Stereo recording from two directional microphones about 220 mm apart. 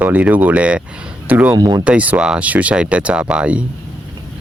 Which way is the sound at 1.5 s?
15° right (ahead or behind).